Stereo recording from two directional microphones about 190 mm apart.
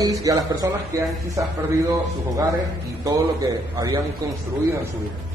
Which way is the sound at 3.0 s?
20° right (ahead or behind).